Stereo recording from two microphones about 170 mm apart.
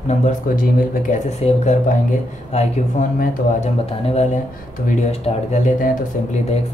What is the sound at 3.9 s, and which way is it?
Speech, 35° left (ahead or behind).